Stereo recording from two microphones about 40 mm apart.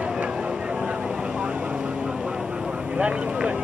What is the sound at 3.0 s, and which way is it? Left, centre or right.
Vehicle, right.